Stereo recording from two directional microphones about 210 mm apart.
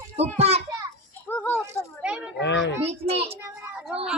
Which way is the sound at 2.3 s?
55° left (ahead or behind).